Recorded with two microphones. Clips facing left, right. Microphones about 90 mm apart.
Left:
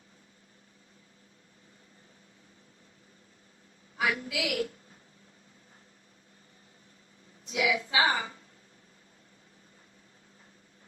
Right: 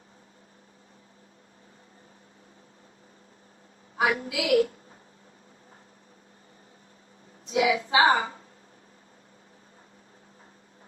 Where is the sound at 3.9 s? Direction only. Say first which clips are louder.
Right 5 dB; 35° right (ahead or behind).